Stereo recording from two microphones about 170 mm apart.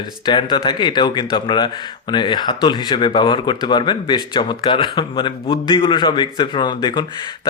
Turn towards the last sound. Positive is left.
turn(degrees=25)  # may be behind; listen again after turning